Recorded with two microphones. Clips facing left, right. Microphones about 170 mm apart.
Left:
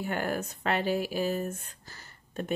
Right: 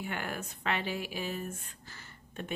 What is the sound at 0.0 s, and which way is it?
Speech, 40° left (ahead or behind).